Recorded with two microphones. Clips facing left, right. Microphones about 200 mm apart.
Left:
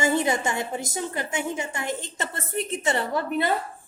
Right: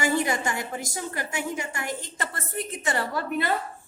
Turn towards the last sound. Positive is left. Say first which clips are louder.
# left 2 dB
turn(degrees=20)  # may be behind; listen again after turning